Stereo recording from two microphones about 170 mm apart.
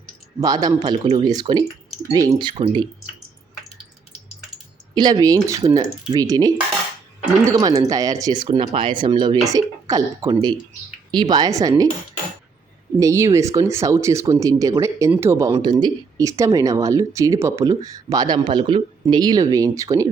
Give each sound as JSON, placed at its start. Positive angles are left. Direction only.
{"t": 0.3, "sound": "speech", "side_deg": -25}
{"t": 0.9, "sound": "speech", "side_deg": -40}
{"t": 1.2, "sound": "speech", "side_deg": -25}
{"t": 4.9, "sound": "speech", "side_deg": -25}
{"t": 7.5, "sound": "speech", "side_deg": -20}
{"t": 13.0, "sound": "speech", "side_deg": -15}